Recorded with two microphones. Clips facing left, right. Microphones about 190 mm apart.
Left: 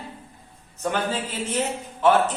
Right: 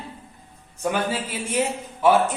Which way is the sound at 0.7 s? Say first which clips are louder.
Right 1 dB; 10° right (ahead or behind).